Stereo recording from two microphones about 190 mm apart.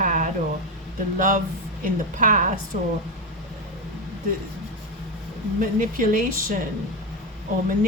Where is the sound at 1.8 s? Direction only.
45° right (ahead or behind).